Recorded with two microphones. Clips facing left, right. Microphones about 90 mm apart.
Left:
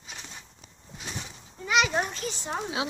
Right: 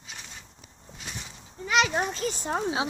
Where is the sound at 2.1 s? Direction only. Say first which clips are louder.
Right 4 dB; 45° right (ahead or behind).